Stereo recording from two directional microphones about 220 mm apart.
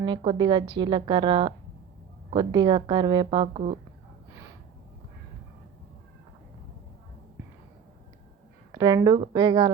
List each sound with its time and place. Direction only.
0.0 s a woman's voice: 20° right (ahead or behind)
8.7 s a woman's voice: 20° right (ahead or behind)